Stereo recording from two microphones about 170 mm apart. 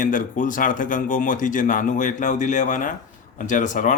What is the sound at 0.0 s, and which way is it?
A man's voice, 50° left (ahead or behind).